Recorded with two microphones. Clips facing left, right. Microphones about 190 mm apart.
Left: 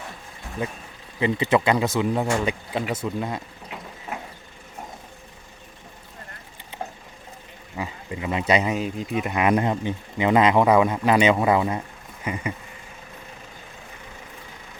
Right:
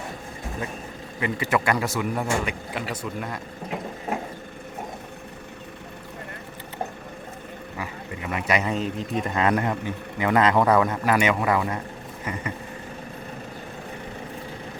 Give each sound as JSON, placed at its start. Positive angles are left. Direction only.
{"t": 1.2, "sound": "a man's voice", "side_deg": 25}
{"t": 7.8, "sound": "a sound", "side_deg": 25}
{"t": 8.7, "sound": "speech", "side_deg": 5}